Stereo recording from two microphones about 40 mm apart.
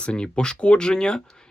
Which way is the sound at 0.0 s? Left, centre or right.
Left.